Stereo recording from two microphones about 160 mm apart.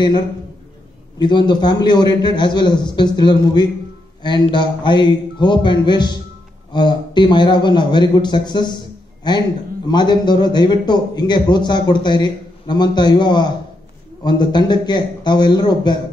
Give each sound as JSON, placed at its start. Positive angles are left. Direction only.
{"t": 1.1, "sound": "a man's voice", "side_deg": 25}